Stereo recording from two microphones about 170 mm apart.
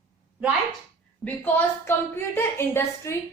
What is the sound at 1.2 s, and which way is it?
A woman's voice, 10° left (ahead or behind).